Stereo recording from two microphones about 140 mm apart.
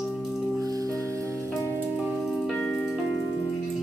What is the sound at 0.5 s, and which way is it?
Music, 25° right (ahead or behind).